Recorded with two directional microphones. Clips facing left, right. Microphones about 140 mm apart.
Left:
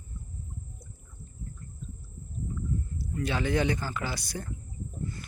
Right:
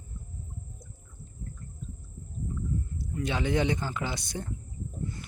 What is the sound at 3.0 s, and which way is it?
Speech, 20° right (ahead or behind).